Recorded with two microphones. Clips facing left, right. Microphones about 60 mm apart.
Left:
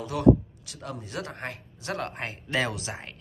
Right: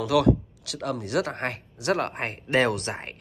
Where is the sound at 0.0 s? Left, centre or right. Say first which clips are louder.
Even; right.